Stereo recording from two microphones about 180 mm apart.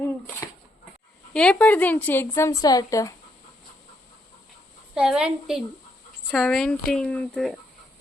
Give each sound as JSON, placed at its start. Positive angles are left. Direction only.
{"t": 1.3, "sound": "a woman's voice", "side_deg": 5}
{"t": 4.9, "sound": "speech", "side_deg": -5}